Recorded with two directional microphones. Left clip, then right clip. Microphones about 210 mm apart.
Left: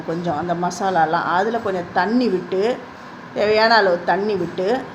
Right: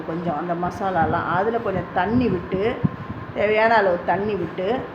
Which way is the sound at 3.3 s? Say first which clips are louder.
Left 3 dB; 20° left (ahead or behind).